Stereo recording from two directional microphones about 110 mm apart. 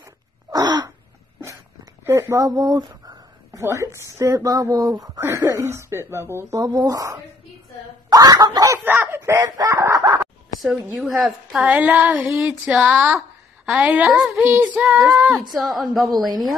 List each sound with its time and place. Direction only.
0.0 s a sound: 35° right (ahead or behind)
2.0 s speech: 30° right (ahead or behind)
3.6 s speech: 25° right (ahead or behind)
6.9 s snicker: 30° right (ahead or behind)
8.8 s speech: 15° right (ahead or behind)
11.0 s a woman's voice: 5° right (ahead or behind)